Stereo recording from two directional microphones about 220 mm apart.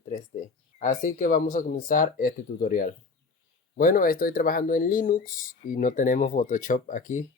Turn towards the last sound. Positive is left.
turn(degrees=35)  # may be behind; listen again after turning